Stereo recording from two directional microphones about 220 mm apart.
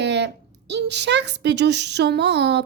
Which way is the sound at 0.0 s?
50° right (ahead or behind).